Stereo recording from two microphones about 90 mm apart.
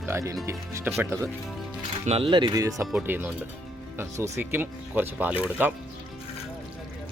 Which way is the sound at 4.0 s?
35° right (ahead or behind).